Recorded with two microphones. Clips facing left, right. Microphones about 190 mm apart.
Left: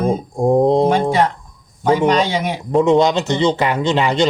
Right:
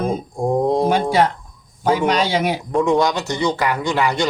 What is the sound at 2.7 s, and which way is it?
Speech, 20° left (ahead or behind).